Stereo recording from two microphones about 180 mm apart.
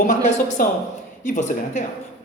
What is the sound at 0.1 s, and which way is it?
A man's voice, 45° left (ahead or behind).